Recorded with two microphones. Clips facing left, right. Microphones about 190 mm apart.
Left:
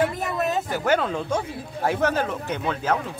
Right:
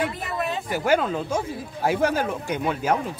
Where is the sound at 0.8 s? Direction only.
5° right (ahead or behind).